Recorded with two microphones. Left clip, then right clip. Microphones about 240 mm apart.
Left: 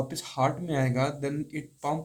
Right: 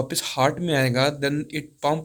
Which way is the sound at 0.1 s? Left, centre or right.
Right.